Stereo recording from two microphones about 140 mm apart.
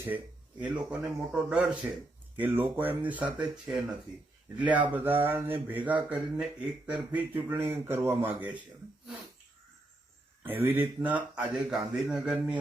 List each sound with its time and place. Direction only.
0.6 s speech: 5° right (ahead or behind)
10.4 s speech: 15° right (ahead or behind)